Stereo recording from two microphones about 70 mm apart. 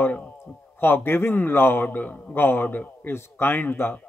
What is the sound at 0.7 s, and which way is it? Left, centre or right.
A man's voice, left.